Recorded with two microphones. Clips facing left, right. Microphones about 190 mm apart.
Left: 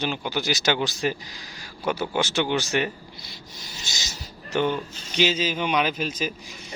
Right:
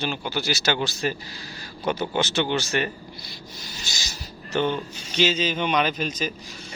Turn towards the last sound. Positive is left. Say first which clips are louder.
# even
turn(degrees=5)  # may be behind; listen again after turning